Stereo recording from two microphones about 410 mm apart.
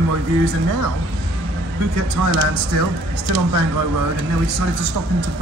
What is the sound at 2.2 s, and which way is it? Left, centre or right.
Speech, right.